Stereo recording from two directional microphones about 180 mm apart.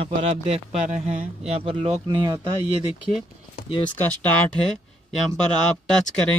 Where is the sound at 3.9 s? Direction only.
10° left (ahead or behind).